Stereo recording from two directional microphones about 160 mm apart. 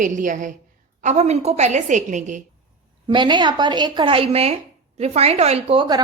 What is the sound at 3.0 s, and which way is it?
A woman's voice, 30° right (ahead or behind).